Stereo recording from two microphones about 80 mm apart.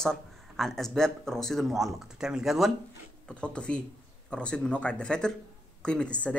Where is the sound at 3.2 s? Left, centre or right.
Centre.